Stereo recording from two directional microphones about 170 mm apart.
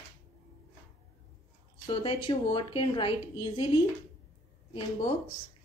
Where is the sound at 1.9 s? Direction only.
30° left (ahead or behind).